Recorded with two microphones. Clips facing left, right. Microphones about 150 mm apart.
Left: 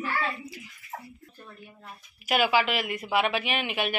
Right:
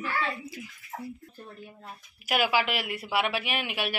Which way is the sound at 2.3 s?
10° right (ahead or behind).